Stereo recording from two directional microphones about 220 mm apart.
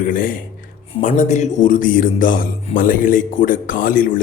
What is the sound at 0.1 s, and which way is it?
A man's voice, 40° left (ahead or behind).